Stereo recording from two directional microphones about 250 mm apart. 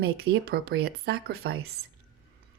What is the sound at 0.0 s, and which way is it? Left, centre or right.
Speech, right.